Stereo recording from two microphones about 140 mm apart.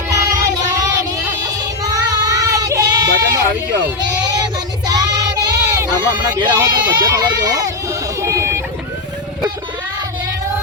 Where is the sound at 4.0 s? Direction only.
30° right (ahead or behind).